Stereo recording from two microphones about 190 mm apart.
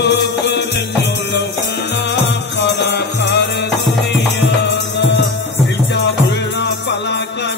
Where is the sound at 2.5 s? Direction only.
65° left (ahead or behind).